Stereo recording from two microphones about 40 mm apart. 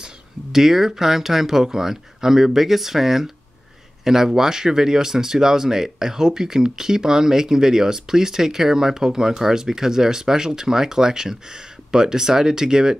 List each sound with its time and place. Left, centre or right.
0.0 s speech: centre